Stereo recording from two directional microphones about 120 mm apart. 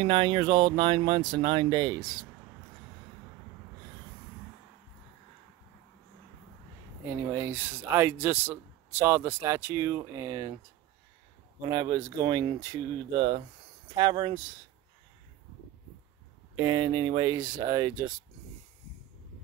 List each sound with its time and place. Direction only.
0.0 s speech: 40° right (ahead or behind)
7.1 s speech: 20° right (ahead or behind)
11.7 s speech: 35° right (ahead or behind)
13.1 s speech: 50° right (ahead or behind)
13.9 s speech: 35° right (ahead or behind)
16.5 s speech: 35° right (ahead or behind)